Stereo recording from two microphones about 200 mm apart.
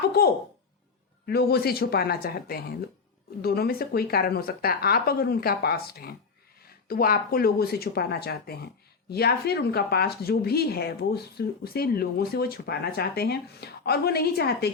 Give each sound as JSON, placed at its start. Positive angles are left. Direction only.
{"t": 1.3, "sound": "speech", "side_deg": 50}